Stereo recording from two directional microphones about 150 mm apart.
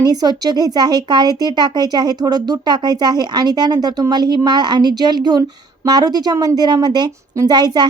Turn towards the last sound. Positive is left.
turn(degrees=-30)  # may be behind; listen again after turning